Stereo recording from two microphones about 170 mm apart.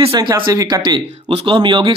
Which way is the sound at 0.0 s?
20° right (ahead or behind).